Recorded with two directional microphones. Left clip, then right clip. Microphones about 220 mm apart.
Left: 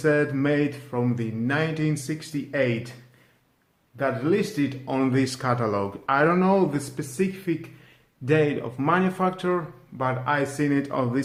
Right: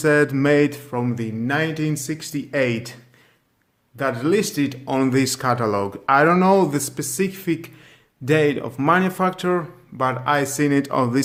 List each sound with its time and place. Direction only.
0.0 s speech: 35° right (ahead or behind)
3.9 s speech: 40° right (ahead or behind)